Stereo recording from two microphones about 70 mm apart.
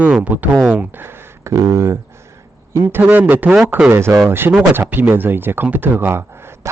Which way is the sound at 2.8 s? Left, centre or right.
Right.